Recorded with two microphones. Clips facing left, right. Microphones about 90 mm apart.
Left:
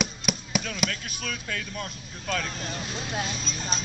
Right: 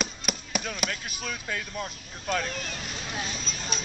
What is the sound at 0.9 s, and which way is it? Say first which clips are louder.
Speech: even; 10° right (ahead or behind).